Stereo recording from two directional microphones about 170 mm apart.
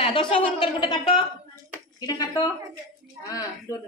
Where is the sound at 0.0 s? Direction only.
30° left (ahead or behind).